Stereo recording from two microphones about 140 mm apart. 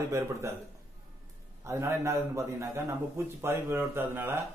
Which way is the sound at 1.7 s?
20° right (ahead or behind).